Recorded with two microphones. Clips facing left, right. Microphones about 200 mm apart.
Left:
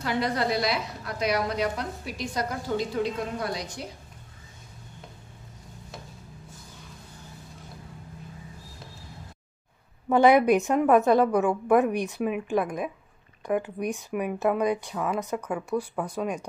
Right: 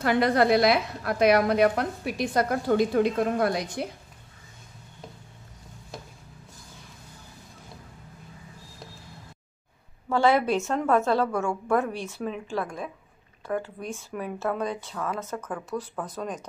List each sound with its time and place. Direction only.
0.0 s a woman's voice: 55° right (ahead or behind)
10.0 s speech: 20° left (ahead or behind)